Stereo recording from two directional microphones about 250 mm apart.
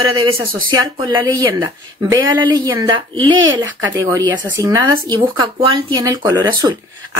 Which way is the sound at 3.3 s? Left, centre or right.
Right.